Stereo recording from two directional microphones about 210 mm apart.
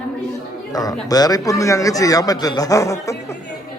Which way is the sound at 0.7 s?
20° left (ahead or behind).